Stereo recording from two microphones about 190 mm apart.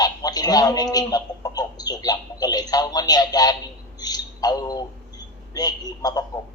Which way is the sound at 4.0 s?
20° left (ahead or behind).